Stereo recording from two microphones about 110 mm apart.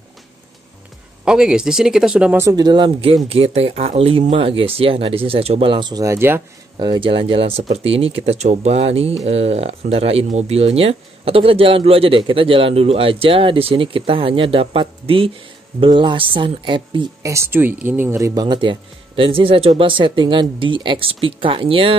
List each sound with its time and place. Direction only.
1.2 s speech: 5° right (ahead or behind)
2.5 s speech: 40° right (ahead or behind)
3.3 s speech: 65° right (ahead or behind); by 6.0 s 45° right (ahead or behind)
6.0 s speech: 20° right (ahead or behind)
6.8 s speech: 45° right (ahead or behind)
15.8 s speech: 45° right (ahead or behind)
17.2 s speech: 25° right (ahead or behind)
18.3 s speech: 40° right (ahead or behind); by 21.9 s 55° right (ahead or behind)